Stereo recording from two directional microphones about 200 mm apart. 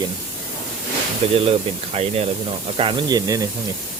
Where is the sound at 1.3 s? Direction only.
30° right (ahead or behind).